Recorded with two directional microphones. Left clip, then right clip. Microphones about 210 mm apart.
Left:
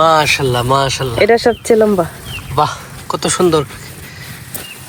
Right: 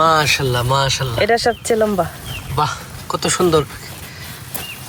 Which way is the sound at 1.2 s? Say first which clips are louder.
Left 5 dB; 25° left (ahead or behind).